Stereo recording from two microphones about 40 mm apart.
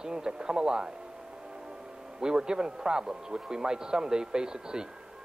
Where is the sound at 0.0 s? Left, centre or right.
Centre.